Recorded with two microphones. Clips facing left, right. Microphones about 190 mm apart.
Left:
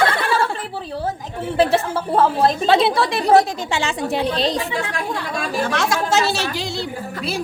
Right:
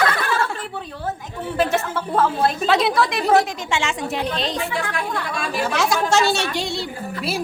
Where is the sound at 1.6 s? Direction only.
30° left (ahead or behind).